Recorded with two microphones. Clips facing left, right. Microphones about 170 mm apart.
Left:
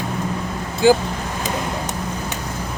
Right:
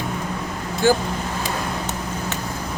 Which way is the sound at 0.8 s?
15° left (ahead or behind).